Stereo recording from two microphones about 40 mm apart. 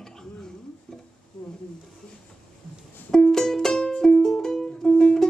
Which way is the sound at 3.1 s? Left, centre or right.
Centre.